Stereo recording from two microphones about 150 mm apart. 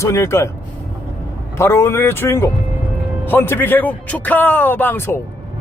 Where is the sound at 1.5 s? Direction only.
15° left (ahead or behind).